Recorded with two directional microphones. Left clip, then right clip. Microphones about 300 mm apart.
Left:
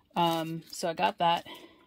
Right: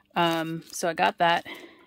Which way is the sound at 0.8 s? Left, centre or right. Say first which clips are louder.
Right 4 dB; centre.